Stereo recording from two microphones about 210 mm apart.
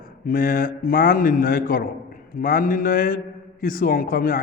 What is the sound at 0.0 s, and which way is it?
A man's voice, 45° left (ahead or behind).